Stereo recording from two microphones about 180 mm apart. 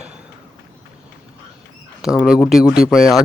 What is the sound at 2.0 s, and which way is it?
Speech, 5° right (ahead or behind).